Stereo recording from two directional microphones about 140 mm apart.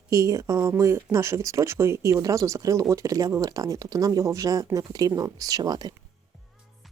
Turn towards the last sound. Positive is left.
turn(degrees=-30)  # may be behind; listen again after turning